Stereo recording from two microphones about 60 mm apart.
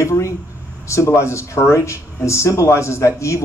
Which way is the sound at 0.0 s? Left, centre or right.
Left.